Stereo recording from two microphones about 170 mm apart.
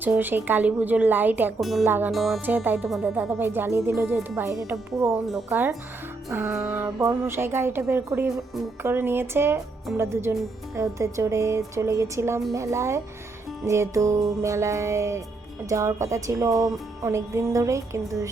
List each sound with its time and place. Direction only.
0.0 s speech: 10° right (ahead or behind)
2.1 s speech: centre (ahead or behind); by 18.0 s 20° right (ahead or behind)